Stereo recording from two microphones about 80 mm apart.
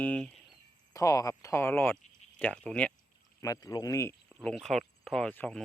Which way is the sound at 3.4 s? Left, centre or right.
Left.